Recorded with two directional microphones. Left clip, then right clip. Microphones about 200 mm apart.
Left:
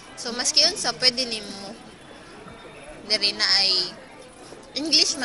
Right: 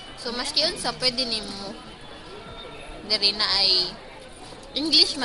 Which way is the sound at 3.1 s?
5° right (ahead or behind).